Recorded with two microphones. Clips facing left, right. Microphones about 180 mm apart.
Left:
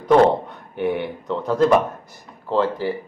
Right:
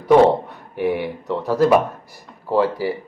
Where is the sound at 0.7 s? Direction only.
5° right (ahead or behind).